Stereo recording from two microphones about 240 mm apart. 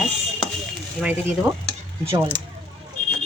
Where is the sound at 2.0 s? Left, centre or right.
Centre.